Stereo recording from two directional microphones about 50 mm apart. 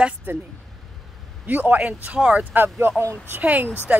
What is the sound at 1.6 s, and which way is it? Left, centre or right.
Speech, right.